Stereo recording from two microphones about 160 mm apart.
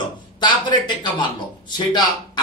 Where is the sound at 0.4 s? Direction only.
30° left (ahead or behind).